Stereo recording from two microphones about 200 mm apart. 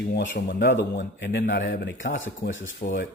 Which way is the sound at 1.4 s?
45° left (ahead or behind).